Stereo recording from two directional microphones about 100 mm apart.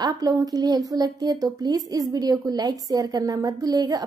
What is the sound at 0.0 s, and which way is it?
A woman's voice, 40° right (ahead or behind).